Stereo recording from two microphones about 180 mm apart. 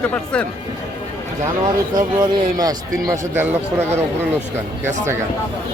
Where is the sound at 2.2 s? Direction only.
20° right (ahead or behind).